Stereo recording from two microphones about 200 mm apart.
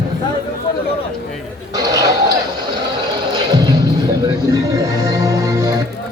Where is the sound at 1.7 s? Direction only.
15° right (ahead or behind).